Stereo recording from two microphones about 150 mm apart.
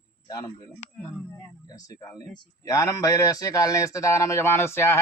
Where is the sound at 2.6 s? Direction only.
25° left (ahead or behind).